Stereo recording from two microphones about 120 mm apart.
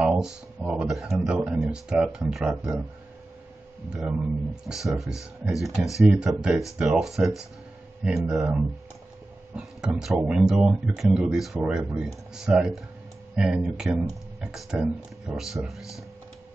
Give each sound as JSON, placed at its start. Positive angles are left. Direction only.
{"t": 0.0, "sound": "speech", "side_deg": -10}
{"t": 4.6, "sound": "speech", "side_deg": 0}
{"t": 15.8, "sound": "speech", "side_deg": 25}